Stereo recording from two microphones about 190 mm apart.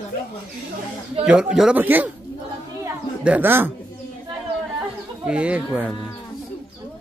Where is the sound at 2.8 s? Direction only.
10° right (ahead or behind).